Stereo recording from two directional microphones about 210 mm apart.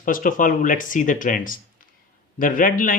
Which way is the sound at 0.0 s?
40° left (ahead or behind).